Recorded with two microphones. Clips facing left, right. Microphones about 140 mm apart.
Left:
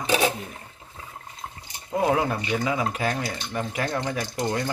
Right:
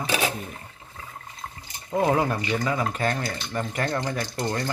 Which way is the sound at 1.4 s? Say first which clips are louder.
Even; 20° left (ahead or behind).